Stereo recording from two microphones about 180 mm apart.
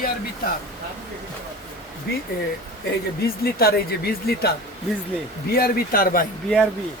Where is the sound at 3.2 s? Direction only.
60° left (ahead or behind).